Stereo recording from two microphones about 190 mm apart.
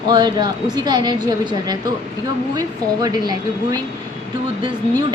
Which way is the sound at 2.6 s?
20° right (ahead or behind).